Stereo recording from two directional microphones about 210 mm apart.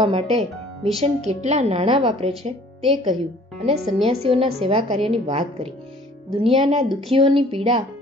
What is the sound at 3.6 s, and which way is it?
A woman's voice, 30° right (ahead or behind).